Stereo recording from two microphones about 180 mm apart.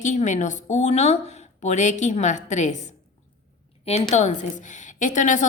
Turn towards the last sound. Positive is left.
turn(degrees=45)  # may be behind; listen again after turning